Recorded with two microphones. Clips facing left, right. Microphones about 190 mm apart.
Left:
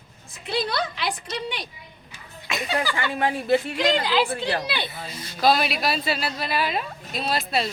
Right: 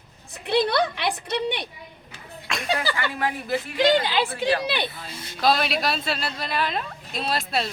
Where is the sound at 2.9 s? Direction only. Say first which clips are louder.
Left 2 dB; 25° left (ahead or behind).